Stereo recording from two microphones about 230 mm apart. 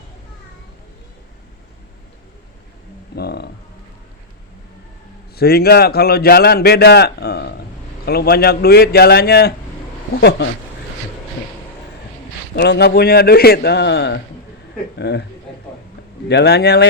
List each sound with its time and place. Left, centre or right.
3.2 s a man's voice: left
5.4 s a man's voice: left
12.5 s a man's voice: left
16.3 s a man's voice: left